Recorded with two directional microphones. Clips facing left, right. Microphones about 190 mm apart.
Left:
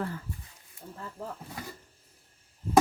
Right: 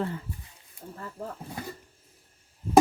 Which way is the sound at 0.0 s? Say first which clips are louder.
Right 3 dB; 20° right (ahead or behind).